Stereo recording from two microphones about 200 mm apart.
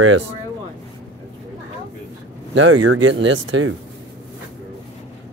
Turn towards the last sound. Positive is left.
turn(degrees=-70)  # may be behind; listen again after turning